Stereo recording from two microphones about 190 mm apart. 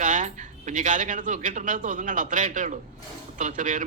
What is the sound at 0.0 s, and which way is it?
Speech, 40° right (ahead or behind).